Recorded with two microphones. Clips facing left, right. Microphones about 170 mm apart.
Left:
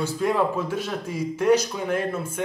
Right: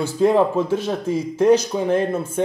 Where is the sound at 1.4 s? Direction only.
25° right (ahead or behind).